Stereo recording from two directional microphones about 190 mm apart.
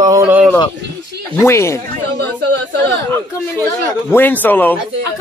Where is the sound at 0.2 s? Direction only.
10° right (ahead or behind).